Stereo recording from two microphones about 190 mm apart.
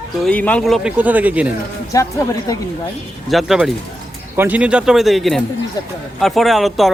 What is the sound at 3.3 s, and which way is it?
A man's voice, centre (ahead or behind).